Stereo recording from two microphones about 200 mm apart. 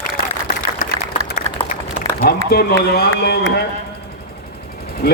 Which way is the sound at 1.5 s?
30° right (ahead or behind).